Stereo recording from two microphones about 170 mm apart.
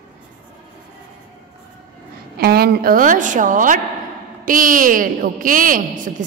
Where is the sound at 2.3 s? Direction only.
65° right (ahead or behind).